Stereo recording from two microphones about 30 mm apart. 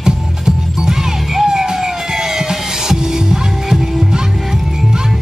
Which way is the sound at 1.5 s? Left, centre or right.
Right.